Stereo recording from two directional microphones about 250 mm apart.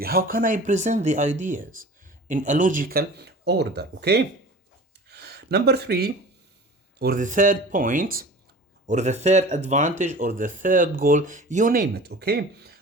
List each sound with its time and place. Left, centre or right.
0.0 s speech: right
5.0 s a sound: right
7.0 s speech: right